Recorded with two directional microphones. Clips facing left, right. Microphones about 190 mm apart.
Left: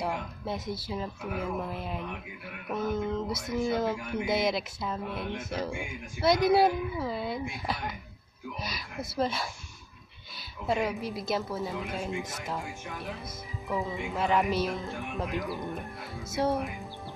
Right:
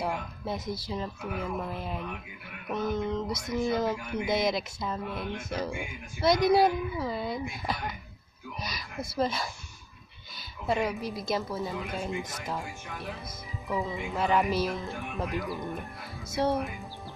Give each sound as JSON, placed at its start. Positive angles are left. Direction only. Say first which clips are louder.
{"t": 0.0, "sound": "speech", "louder": "even", "side_deg": 0}
{"t": 10.7, "sound": "speech", "louder": "even", "side_deg": 0}
{"t": 13.7, "sound": "speech", "louder": "even", "side_deg": 0}